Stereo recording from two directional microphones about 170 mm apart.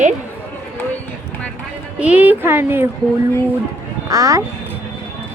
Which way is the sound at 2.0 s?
10° right (ahead or behind).